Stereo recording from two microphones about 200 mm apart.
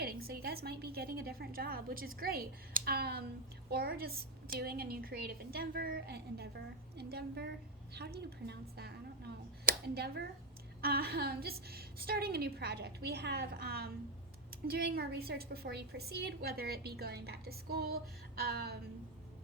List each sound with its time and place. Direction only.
0.0 s a woman's voice: 50° right (ahead or behind)